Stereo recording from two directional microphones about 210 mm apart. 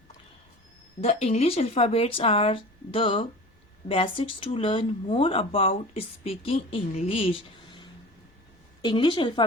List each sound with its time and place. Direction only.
1.0 s speech: 30° left (ahead or behind)